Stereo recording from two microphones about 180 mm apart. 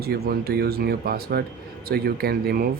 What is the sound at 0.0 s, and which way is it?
Speech, 60° right (ahead or behind).